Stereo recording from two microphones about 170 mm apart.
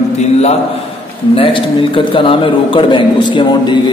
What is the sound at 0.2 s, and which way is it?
A man's voice, 40° left (ahead or behind).